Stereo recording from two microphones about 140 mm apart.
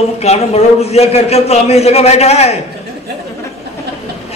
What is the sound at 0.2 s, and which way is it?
A man's voice, 50° left (ahead or behind).